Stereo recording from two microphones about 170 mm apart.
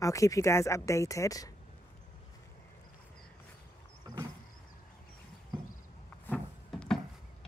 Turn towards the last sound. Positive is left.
turn(degrees=0)  # may be behind; listen again after turning